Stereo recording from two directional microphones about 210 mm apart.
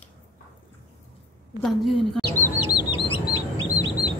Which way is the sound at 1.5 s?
Centre (ahead or behind).